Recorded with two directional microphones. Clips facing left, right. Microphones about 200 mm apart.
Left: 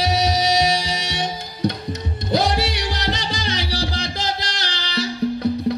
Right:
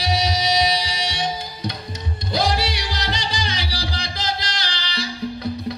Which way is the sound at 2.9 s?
65° left (ahead or behind).